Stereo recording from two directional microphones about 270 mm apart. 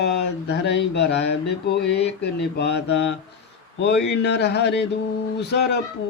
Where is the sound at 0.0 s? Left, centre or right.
Left.